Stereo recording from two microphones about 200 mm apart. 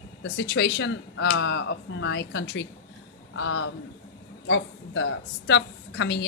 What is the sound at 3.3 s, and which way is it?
A man's voice, 75° left (ahead or behind).